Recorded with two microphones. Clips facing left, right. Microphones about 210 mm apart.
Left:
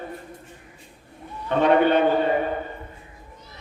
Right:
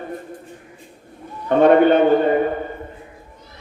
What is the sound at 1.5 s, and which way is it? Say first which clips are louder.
Speech: right 6 dB; 50° right (ahead or behind).